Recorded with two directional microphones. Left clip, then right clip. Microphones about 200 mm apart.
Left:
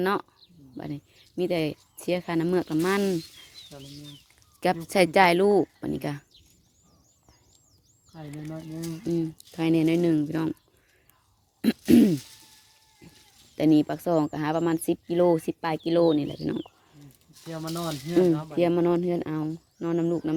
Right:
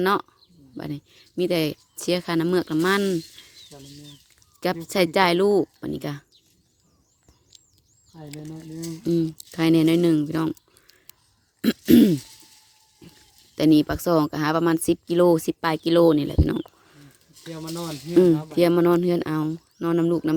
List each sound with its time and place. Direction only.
0.0 s speech: 15° right (ahead or behind)
4.6 s speech: 5° right (ahead or behind)
9.0 s speech: 25° right (ahead or behind)
11.9 s speech: 15° right (ahead or behind)
13.0 s goat: 15° right (ahead or behind)
13.6 s speech: 15° right (ahead or behind)
17.5 s speech: 10° left (ahead or behind)
18.5 s speech: 20° right (ahead or behind)